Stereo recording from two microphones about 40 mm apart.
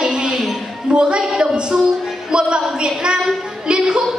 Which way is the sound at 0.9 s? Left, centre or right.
Right.